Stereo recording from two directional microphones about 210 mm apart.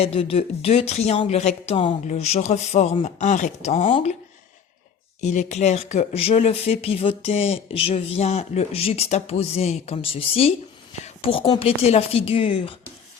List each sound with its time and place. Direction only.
0.0 s speech: 25° left (ahead or behind)
5.2 s speech: 35° left (ahead or behind)